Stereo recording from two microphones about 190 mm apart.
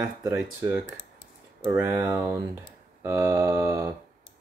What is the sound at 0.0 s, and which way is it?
Speech, 15° right (ahead or behind).